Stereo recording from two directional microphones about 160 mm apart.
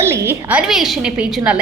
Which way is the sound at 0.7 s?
Centre (ahead or behind).